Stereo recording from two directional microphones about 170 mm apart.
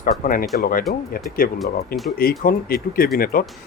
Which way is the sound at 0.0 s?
55° left (ahead or behind).